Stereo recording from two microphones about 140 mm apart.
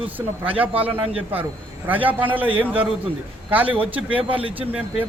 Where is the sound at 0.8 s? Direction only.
10° right (ahead or behind).